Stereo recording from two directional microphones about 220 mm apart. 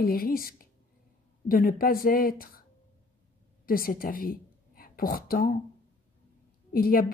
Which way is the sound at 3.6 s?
40° left (ahead or behind).